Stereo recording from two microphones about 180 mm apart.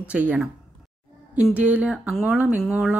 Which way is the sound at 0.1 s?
5° right (ahead or behind).